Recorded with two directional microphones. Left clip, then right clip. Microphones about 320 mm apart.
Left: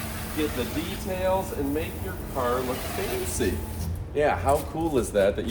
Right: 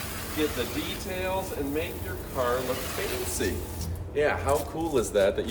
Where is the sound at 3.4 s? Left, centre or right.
Centre.